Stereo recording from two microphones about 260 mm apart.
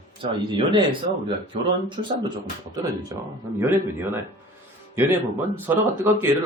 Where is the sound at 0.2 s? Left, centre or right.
Centre.